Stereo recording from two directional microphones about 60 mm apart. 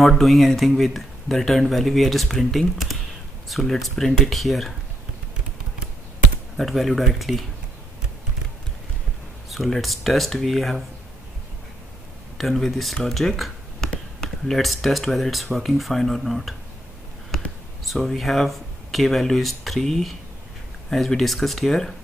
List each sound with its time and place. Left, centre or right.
0.0 s speech: centre
6.5 s speech: centre
9.5 s speech: centre
12.4 s speech: centre
17.8 s speech: centre